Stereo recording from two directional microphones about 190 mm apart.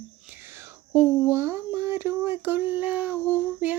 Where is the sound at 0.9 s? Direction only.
10° right (ahead or behind).